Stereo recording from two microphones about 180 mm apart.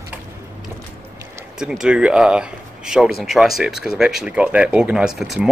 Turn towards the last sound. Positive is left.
turn(degrees=0)  # may be behind; listen again after turning